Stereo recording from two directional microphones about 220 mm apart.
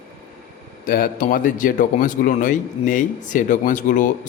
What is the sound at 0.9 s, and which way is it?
A man's voice, 40° left (ahead or behind).